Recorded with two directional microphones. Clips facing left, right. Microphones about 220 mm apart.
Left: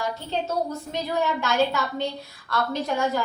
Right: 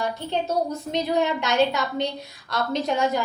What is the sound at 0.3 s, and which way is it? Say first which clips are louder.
A woman's voice: right 2 dB; 20° right (ahead or behind).